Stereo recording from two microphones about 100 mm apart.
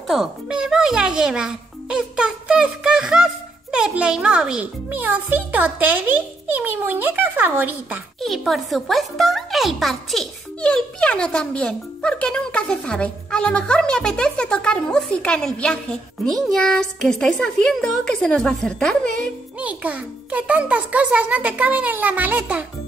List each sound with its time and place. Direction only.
0.1 s a child's voice: 5° right (ahead or behind)
8.2 s a child's voice: centre (ahead or behind)
19.6 s a child's voice: 15° right (ahead or behind)